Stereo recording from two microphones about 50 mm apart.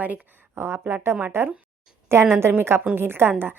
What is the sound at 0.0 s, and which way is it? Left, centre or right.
Speech, right.